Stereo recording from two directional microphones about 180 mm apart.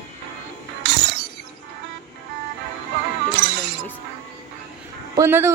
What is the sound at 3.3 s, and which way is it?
Music, 75° right (ahead or behind).